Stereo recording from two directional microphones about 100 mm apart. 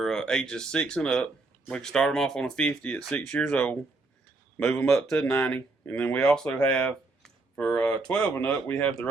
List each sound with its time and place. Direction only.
0.0 s speech: 5° left (ahead or behind)
4.5 s speech: 25° left (ahead or behind)
5.1 s speech: 10° left (ahead or behind)